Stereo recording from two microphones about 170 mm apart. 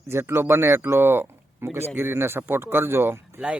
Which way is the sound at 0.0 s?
15° right (ahead or behind).